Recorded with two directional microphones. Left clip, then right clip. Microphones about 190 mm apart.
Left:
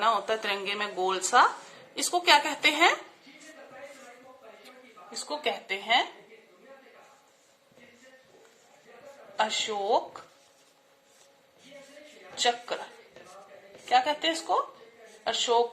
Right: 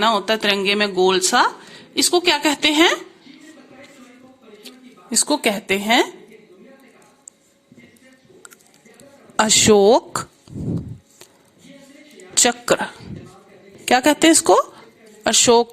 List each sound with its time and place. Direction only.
0.0 s speech: 25° right (ahead or behind)
5.3 s a woman's voice: 55° right (ahead or behind)
9.4 s speech: 65° right (ahead or behind)
12.3 s a woman's voice: 65° right (ahead or behind)